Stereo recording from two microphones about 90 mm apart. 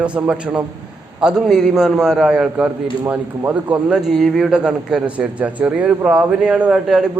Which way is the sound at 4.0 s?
5° right (ahead or behind).